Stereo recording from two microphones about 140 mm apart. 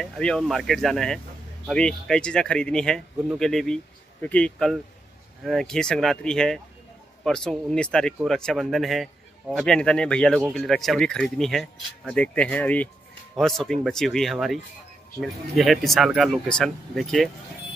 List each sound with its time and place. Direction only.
0.0 s speech: 5° left (ahead or behind)